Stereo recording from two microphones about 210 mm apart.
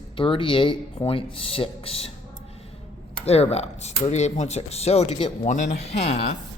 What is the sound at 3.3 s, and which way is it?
Speech, 30° left (ahead or behind).